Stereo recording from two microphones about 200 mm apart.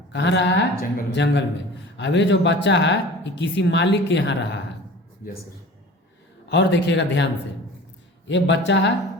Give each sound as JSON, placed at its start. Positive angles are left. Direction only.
{"t": 0.1, "sound": "speech", "side_deg": 60}
{"t": 6.5, "sound": "speech", "side_deg": 60}
{"t": 8.3, "sound": "speech", "side_deg": 65}